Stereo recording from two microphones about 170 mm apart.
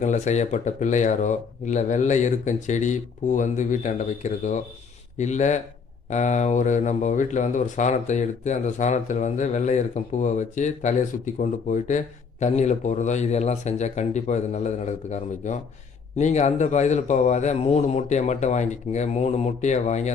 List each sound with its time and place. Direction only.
0.0 s speech: 45° left (ahead or behind)